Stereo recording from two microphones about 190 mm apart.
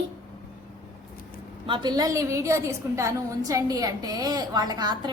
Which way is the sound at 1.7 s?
25° right (ahead or behind).